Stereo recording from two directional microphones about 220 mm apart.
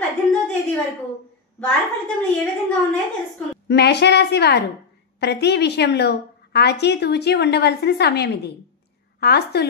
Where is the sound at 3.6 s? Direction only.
50° left (ahead or behind).